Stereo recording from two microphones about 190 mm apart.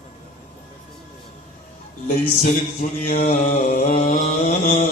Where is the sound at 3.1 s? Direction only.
45° left (ahead or behind).